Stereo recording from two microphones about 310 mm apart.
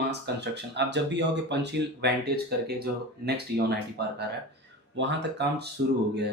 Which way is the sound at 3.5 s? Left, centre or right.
Right.